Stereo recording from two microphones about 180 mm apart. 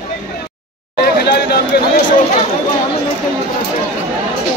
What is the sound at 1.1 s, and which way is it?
Speech, 60° left (ahead or behind).